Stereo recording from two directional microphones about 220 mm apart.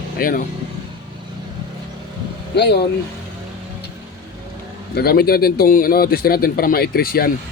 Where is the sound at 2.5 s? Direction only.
50° left (ahead or behind).